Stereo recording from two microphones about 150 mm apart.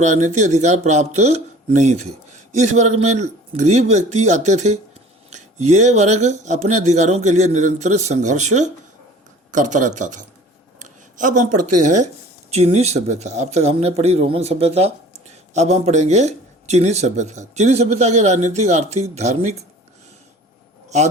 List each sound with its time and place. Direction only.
0.0 s speech: 50° right (ahead or behind)
10.8 s a sound: 60° right (ahead or behind)
12.5 s speech: 45° right (ahead or behind)